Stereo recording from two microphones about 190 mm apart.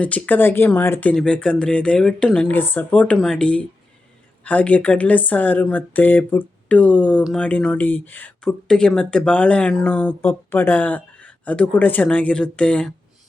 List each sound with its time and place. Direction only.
0.0 s speech: 10° left (ahead or behind)